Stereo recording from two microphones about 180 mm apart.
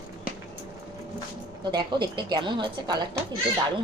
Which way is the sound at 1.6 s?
25° right (ahead or behind).